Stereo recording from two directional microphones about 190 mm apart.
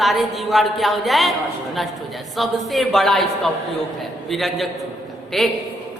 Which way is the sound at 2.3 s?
Centre (ahead or behind).